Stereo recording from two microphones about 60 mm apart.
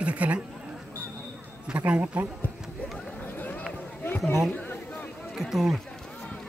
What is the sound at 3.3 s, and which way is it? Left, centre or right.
Run, left.